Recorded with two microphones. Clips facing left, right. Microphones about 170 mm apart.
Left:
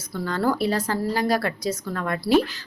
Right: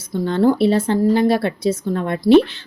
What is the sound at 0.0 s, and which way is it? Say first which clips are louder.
A woman's voice: right 8 dB; 25° right (ahead or behind).